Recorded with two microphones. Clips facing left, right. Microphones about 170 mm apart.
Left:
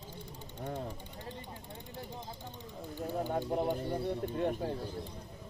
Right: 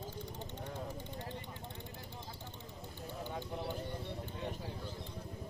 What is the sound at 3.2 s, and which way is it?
Speech, 50° left (ahead or behind).